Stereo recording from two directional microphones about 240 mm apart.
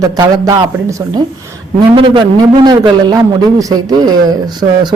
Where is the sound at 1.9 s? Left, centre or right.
Centre.